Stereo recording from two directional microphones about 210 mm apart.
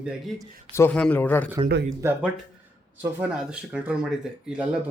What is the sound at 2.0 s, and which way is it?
Speech, 10° right (ahead or behind).